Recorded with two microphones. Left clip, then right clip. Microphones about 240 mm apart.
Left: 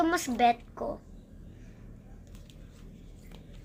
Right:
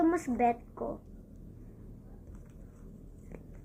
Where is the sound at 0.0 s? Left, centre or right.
Left.